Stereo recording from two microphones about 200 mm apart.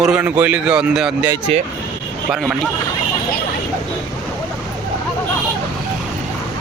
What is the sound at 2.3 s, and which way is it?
Speech, centre (ahead or behind).